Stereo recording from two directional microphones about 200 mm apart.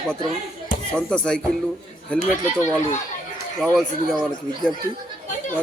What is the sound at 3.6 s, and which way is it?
Speech, centre (ahead or behind).